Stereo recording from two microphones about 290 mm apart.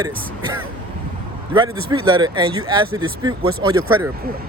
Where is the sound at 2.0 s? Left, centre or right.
Centre.